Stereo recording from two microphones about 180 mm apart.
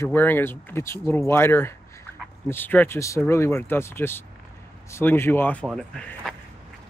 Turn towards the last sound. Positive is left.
turn(degrees=5)  # may be behind; listen again after turning